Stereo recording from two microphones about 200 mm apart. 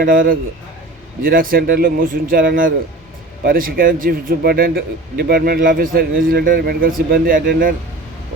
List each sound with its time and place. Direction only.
0.0 s speech: 45° right (ahead or behind)